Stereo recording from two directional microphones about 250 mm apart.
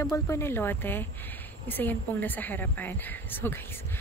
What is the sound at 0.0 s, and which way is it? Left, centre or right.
A woman's voice, centre.